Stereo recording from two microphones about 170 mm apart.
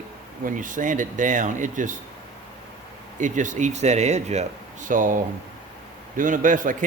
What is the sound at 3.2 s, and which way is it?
A man's voice, 50° right (ahead or behind).